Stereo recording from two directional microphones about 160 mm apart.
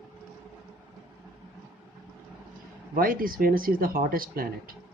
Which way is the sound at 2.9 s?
60° right (ahead or behind).